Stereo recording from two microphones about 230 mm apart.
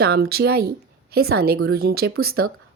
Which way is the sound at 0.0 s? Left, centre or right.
Right.